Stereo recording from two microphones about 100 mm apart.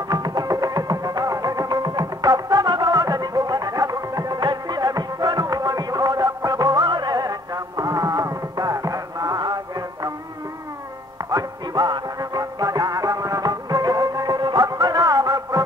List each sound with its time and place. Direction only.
0.1 s music: 45° right (ahead or behind)
11.2 s music: 40° right (ahead or behind)